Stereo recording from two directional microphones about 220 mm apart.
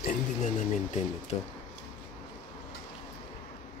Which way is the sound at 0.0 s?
35° left (ahead or behind).